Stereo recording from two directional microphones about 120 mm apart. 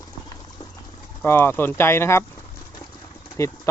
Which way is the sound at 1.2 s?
20° left (ahead or behind).